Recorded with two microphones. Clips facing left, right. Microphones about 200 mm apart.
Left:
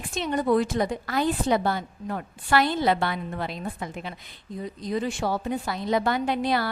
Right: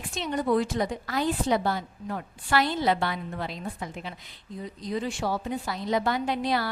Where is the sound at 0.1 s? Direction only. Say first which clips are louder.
Left 3 dB; 50° left (ahead or behind).